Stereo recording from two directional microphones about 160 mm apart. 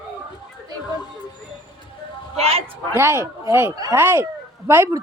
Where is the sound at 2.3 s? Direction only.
40° right (ahead or behind).